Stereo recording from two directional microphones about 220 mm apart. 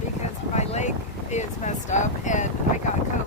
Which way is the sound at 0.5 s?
30° left (ahead or behind).